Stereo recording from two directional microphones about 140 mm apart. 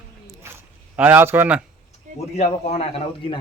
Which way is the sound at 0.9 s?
15° right (ahead or behind).